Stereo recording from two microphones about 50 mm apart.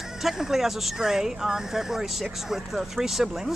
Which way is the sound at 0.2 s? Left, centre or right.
Centre.